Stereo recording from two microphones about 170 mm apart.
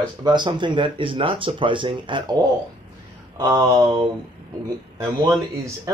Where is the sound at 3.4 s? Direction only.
20° right (ahead or behind).